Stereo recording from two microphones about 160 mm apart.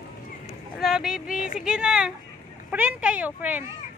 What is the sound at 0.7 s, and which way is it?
Speech, centre (ahead or behind).